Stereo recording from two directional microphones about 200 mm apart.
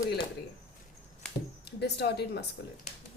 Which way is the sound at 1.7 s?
55° left (ahead or behind).